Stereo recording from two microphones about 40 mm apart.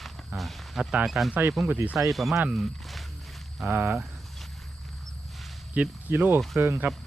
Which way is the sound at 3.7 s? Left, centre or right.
Right.